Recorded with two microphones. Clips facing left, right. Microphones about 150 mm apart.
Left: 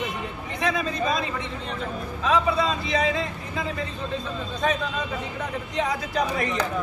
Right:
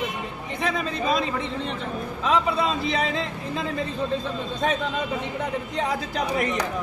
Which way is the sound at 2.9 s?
25° right (ahead or behind).